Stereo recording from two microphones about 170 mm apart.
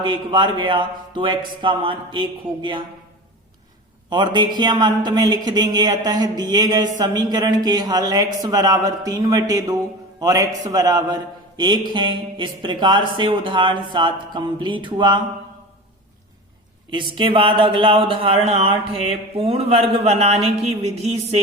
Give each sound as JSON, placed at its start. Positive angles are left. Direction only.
{"t": 0.0, "sound": "a man's voice", "side_deg": -25}
{"t": 4.1, "sound": "a man's voice", "side_deg": -25}
{"t": 16.9, "sound": "speech", "side_deg": -30}